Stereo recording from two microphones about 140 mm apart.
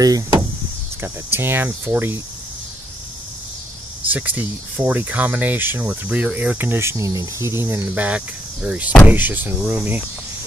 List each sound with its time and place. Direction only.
0.0 s speech: 25° right (ahead or behind)
1.0 s speech: 15° right (ahead or behind)
4.1 s speech: 10° right (ahead or behind)